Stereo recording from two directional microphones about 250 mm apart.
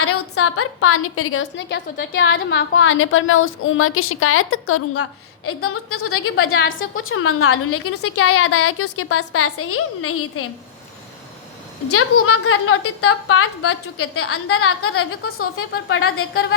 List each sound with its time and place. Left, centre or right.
0.0 s a woman's voice: left
11.9 s a woman's voice: left